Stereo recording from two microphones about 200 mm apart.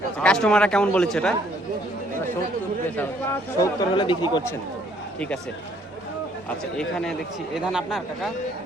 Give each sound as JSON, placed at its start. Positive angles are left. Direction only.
{"t": 0.2, "sound": "speech", "side_deg": 5}
{"t": 3.6, "sound": "speech", "side_deg": 20}
{"t": 6.7, "sound": "speech", "side_deg": 5}